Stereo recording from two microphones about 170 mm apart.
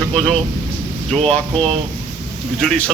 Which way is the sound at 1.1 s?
35° right (ahead or behind).